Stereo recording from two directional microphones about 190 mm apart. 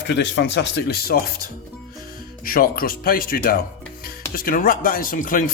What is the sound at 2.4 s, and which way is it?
Speech, 50° left (ahead or behind).